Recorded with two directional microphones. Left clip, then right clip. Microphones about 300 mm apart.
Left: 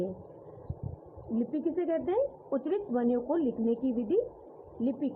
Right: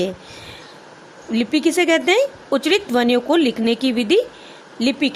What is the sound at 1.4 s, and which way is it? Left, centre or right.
Speech, right.